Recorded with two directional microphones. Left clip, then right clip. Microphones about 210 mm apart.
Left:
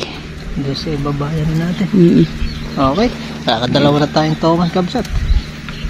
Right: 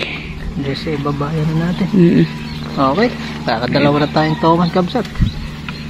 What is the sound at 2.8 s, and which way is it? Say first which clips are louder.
Speech: even; 35° left (ahead or behind).